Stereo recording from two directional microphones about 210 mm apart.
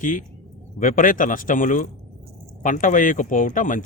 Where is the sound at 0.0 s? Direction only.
40° left (ahead or behind).